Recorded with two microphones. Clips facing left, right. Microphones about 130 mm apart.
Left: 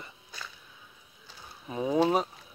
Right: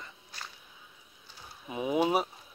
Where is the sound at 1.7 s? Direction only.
15° right (ahead or behind).